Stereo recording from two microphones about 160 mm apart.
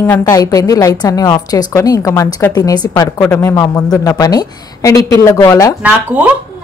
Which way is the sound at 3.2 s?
15° left (ahead or behind).